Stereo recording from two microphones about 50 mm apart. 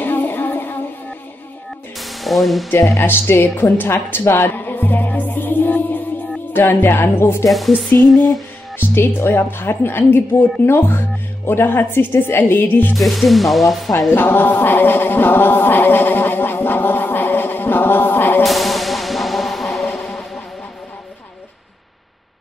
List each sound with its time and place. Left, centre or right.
0.0 s a sound: left
2.0 s music: centre
3.0 s speech: left
3.5 s music: left
6.5 s speech: left
12.9 s music: centre
14.1 s chant: left
18.4 s music: centre